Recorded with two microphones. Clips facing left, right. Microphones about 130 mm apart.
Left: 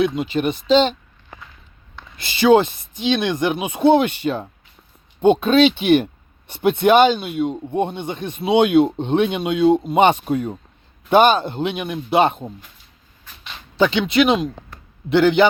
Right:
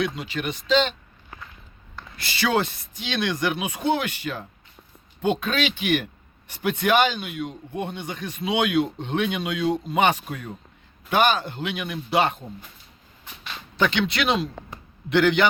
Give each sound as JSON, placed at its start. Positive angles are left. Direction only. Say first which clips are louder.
{"t": 0.0, "sound": "speech", "louder": "left 8 dB", "side_deg": 25}
{"t": 2.1, "sound": "speech", "louder": "left 10 dB", "side_deg": 20}
{"t": 13.7, "sound": "speech", "louder": "left 7 dB", "side_deg": 15}